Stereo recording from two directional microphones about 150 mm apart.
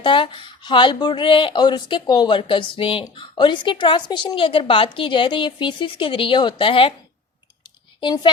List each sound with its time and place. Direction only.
0.0 s speech: 30° left (ahead or behind)
7.6 s clicking: 30° left (ahead or behind)